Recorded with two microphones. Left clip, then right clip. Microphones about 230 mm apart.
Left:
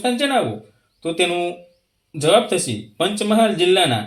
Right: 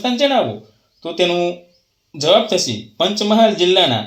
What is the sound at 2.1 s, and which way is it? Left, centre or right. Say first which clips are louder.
Speech: right 2 dB; centre.